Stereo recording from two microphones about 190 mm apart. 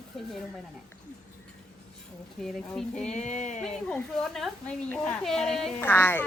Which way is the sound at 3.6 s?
5° left (ahead or behind).